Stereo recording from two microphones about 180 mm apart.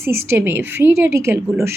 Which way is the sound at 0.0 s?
15° right (ahead or behind).